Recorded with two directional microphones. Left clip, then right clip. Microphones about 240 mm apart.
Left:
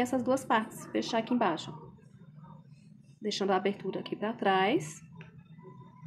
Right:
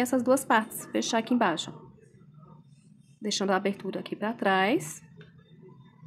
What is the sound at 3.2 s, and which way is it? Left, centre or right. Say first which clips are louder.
Speech: right 2 dB; right.